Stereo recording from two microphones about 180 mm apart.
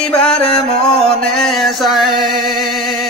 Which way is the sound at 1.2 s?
Centre (ahead or behind).